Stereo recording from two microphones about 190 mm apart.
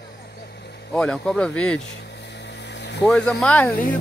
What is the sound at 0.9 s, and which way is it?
Speech, 5° left (ahead or behind).